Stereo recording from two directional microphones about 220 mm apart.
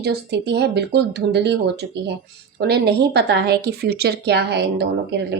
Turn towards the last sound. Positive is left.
turn(degrees=-50)  # may be behind; listen again after turning